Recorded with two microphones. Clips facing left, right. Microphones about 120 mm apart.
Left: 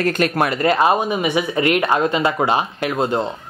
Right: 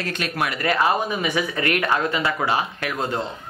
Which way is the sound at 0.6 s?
25° left (ahead or behind).